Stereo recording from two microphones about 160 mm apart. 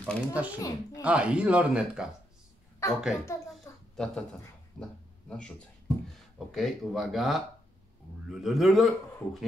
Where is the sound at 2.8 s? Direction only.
15° left (ahead or behind).